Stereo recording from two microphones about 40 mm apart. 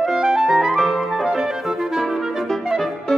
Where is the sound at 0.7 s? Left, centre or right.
Centre.